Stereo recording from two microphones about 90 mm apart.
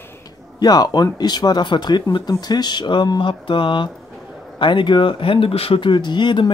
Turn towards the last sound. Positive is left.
turn(degrees=60)  # may be behind; listen again after turning